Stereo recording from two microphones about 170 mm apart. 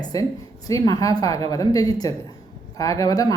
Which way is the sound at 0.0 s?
20° left (ahead or behind).